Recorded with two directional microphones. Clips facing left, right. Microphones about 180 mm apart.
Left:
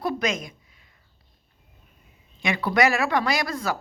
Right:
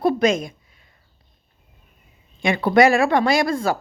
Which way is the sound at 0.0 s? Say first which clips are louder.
Right 8 dB; 30° right (ahead or behind).